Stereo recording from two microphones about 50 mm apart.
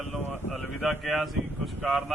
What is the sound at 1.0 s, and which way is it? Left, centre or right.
Speech, centre.